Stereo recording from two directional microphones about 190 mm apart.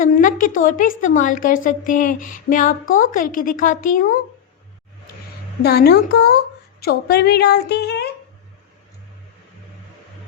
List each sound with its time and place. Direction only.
0.0 s a woman's voice: 45° left (ahead or behind)
5.6 s a woman's voice: 55° left (ahead or behind)